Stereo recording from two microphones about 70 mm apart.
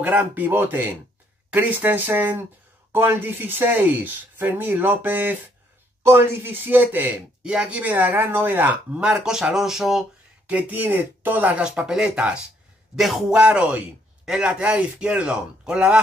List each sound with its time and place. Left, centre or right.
0.0 s speech: right
7.4 s speech: centre
9.0 s speech: centre
10.7 s speech: right
11.6 s a man's voice: centre
13.4 s speech: right